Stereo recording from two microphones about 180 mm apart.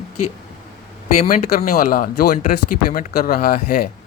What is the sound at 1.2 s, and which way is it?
Speech, 40° left (ahead or behind).